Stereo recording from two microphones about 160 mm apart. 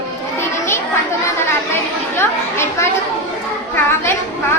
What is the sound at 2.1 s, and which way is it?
Speech, 15° left (ahead or behind).